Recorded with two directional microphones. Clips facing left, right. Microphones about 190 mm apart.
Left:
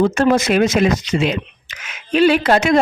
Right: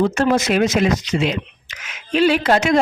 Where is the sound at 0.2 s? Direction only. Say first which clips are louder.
Left 2 dB; 55° left (ahead or behind).